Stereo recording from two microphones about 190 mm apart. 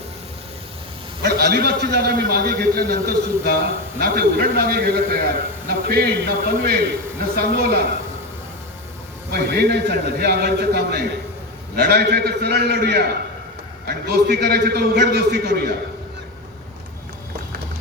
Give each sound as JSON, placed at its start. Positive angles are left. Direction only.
{"t": 1.2, "sound": "a man's voice", "side_deg": -60}
{"t": 9.3, "sound": "a man's voice", "side_deg": -55}